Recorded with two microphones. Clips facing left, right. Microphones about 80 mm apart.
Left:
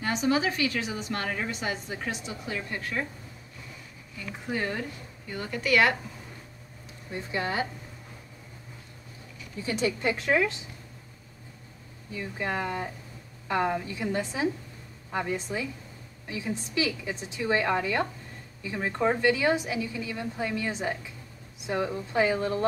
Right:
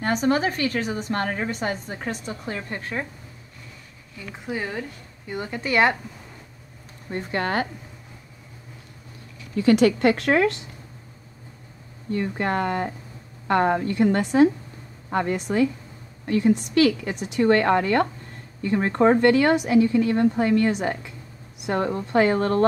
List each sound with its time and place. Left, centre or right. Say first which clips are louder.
0.0 s a woman's voice: right 4 dB; right
4.5 s speech: right 1 dB; centre
5.3 s a woman's voice: right 2 dB; right
7.1 s speech: right 5 dB; right
9.6 s a woman's voice: right 12 dB; right
12.1 s speech: right 8 dB; right